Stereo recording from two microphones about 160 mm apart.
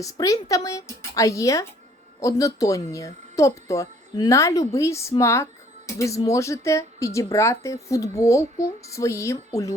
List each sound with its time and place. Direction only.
0.0 s speech: 20° left (ahead or behind)